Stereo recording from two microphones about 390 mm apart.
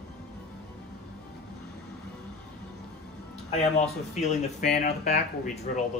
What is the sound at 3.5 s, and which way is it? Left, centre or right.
Speech, centre.